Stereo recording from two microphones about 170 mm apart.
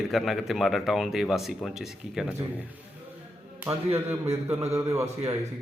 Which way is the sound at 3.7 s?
25° right (ahead or behind).